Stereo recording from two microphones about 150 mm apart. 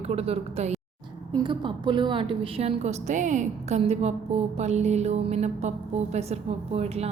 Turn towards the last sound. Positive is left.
turn(degrees=-45)  # may be behind; listen again after turning